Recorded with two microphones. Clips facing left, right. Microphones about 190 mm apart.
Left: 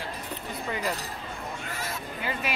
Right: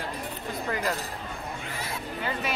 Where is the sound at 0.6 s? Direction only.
5° left (ahead or behind).